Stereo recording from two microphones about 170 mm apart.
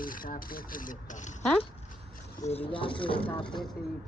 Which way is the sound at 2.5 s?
35° left (ahead or behind).